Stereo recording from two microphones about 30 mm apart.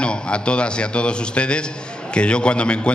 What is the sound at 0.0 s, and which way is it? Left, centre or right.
A man's voice, left.